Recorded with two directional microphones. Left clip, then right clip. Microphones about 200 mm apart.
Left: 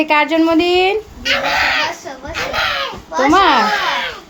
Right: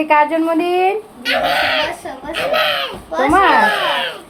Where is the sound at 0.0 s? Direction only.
30° left (ahead or behind).